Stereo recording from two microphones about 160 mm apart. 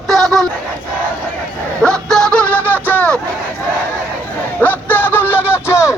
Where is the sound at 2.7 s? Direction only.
10° left (ahead or behind).